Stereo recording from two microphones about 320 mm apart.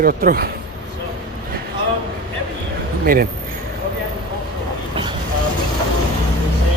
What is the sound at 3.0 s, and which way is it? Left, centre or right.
Speech, right.